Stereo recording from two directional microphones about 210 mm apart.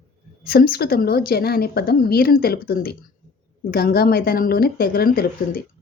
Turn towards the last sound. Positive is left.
turn(degrees=45)  # may be behind; listen again after turning